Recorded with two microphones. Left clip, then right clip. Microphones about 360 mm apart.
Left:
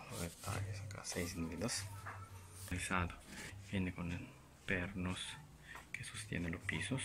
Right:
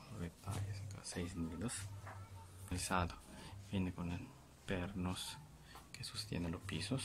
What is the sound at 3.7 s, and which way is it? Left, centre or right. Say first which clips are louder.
Speech: left 1 dB; centre.